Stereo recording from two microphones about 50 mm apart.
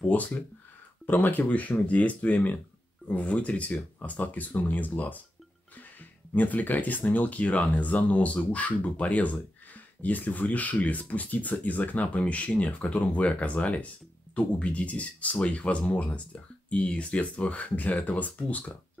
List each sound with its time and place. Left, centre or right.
0.0 s speech: left
6.3 s speech: left